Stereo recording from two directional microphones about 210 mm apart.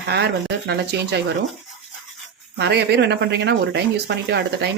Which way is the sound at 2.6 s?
50° right (ahead or behind).